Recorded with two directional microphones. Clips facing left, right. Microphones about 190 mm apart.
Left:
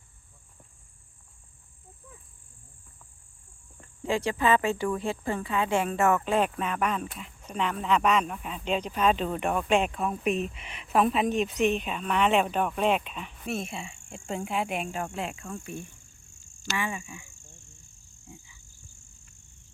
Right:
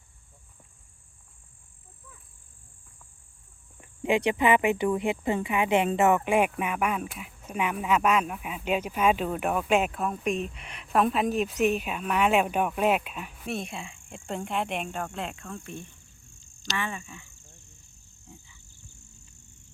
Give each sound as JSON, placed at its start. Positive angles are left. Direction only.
{"t": 3.8, "sound": "speech", "side_deg": -20}
{"t": 17.4, "sound": "a sound", "side_deg": -20}
{"t": 18.3, "sound": "frog", "side_deg": 10}